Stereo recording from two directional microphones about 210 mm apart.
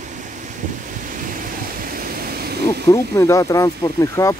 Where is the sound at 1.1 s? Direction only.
40° right (ahead or behind).